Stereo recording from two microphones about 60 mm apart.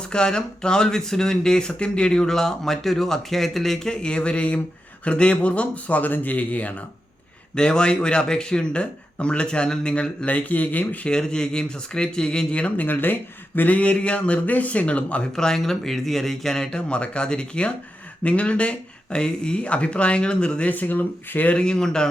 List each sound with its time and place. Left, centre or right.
0.1 s speech: centre
7.5 s speech: centre
11.1 s speech: centre
15.4 s speech: centre
20.7 s speech: left
21.6 s speech: centre